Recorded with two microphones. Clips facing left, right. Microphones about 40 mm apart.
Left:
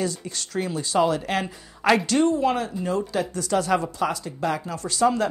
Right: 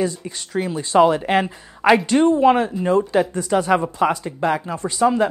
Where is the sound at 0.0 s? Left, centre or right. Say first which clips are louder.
Right 5 dB; centre.